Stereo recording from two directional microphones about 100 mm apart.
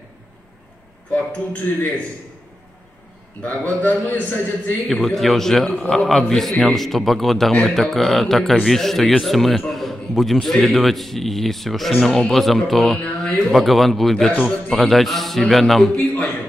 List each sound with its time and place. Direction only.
1.1 s speech: 15° left (ahead or behind)
3.4 s speech: 15° left (ahead or behind)
4.8 s a man's voice: centre (ahead or behind)
13.0 s a sound: 15° left (ahead or behind)
13.5 s a man's voice: centre (ahead or behind)